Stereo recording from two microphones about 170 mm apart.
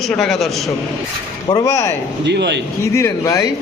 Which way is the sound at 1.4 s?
20° left (ahead or behind).